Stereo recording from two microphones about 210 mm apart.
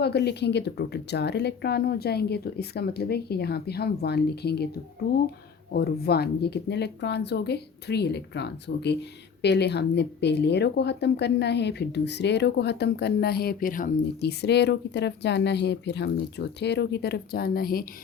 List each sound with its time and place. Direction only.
0.0 s speech: 50° left (ahead or behind)
5.7 s speech: 50° left (ahead or behind)